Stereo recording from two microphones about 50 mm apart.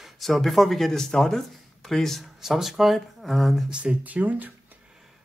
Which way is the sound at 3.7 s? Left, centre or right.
Right.